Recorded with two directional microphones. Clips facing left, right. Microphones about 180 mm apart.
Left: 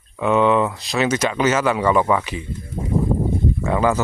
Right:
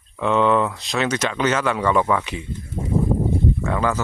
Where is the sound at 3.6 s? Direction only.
10° left (ahead or behind).